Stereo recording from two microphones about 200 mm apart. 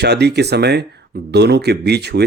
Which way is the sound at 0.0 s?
55° right (ahead or behind).